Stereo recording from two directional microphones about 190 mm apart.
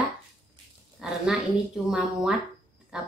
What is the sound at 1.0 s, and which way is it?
Speech, 5° right (ahead or behind).